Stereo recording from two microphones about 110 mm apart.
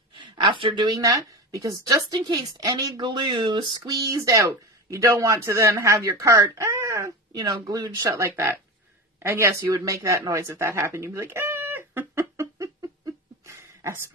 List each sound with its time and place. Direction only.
0.1 s a woman's voice: 45° right (ahead or behind); by 7.4 s 30° right (ahead or behind)
7.4 s speech: 40° right (ahead or behind); by 8.5 s 25° right (ahead or behind)
9.2 s a sound: 25° right (ahead or behind)